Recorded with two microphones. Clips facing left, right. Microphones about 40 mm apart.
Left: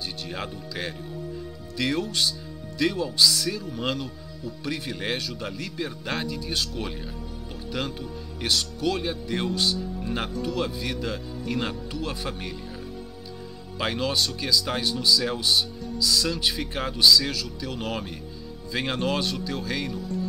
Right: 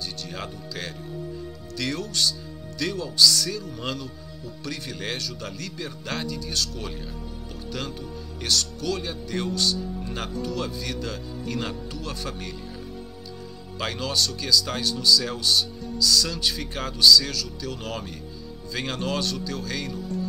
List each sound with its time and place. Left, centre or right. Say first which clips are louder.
0.4 s speech: left 2 dB; centre
8.5 s speech: left 1 dB; centre
9.8 s speech: left 2 dB; centre
13.7 s speech: left 1 dB; centre
20.0 s music: even; centre